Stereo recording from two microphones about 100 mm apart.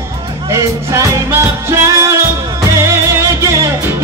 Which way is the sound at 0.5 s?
30° right (ahead or behind).